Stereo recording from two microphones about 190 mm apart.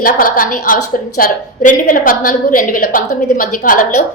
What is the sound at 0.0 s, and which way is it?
A woman's voice, 45° left (ahead or behind).